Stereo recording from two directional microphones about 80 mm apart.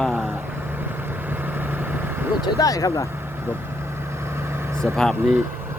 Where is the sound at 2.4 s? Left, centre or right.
Left.